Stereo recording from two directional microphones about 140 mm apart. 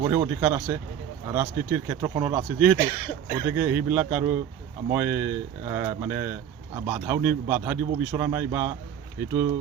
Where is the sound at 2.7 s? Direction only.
90° left.